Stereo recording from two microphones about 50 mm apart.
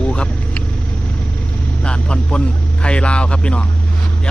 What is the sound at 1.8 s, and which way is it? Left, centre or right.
A man's voice, centre.